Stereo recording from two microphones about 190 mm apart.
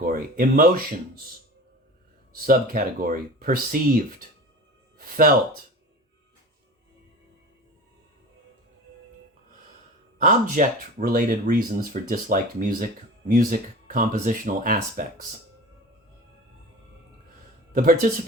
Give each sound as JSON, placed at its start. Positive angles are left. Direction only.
{"t": 0.0, "sound": "speech", "side_deg": -50}
{"t": 2.3, "sound": "speech", "side_deg": -50}
{"t": 4.9, "sound": "music", "side_deg": -50}
{"t": 10.2, "sound": "speech", "side_deg": -45}
{"t": 17.7, "sound": "speech", "side_deg": -45}